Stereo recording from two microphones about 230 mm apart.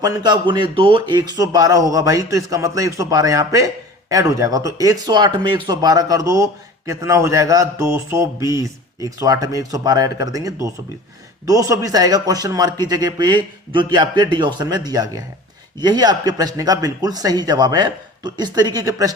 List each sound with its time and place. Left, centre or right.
0.0 s speech: centre